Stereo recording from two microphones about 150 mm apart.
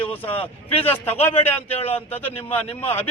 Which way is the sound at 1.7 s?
40° left (ahead or behind).